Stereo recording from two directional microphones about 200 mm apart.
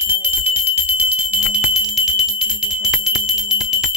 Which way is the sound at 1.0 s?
5° right (ahead or behind).